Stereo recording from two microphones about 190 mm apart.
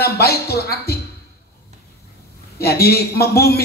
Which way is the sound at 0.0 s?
55° left (ahead or behind).